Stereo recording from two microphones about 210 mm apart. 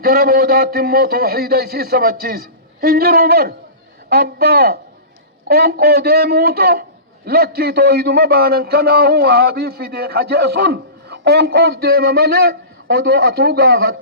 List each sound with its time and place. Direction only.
0.0 s a man's voice: 45° right (ahead or behind)